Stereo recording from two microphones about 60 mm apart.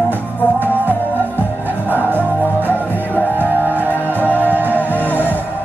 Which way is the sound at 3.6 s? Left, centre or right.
Right.